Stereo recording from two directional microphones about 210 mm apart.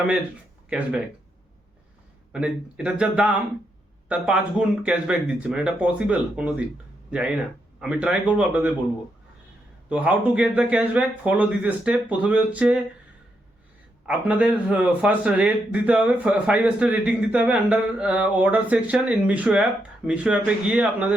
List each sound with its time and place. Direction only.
2.3 s speech: 5° right (ahead or behind)
9.9 s a man's voice: 5° right (ahead or behind)
14.1 s a man's voice: 5° right (ahead or behind)